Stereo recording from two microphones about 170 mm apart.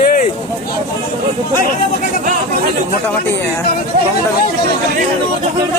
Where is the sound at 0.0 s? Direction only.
55° left (ahead or behind).